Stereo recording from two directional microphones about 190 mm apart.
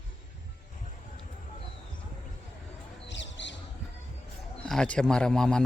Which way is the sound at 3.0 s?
70° left (ahead or behind).